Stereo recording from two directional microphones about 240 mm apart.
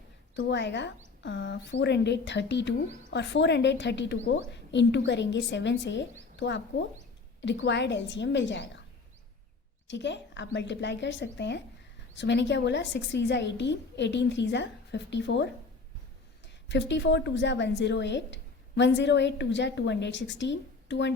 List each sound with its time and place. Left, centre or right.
0.3 s speech: left
9.8 s speech: left
16.6 s speech: left